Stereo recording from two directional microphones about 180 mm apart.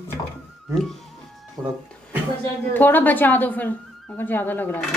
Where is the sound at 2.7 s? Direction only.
10° left (ahead or behind).